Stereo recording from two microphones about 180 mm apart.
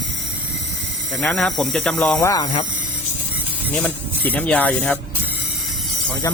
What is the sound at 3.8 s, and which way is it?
Speech, 10° left (ahead or behind).